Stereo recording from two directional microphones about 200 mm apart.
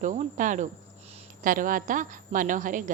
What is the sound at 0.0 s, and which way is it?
A woman's voice, 40° right (ahead or behind).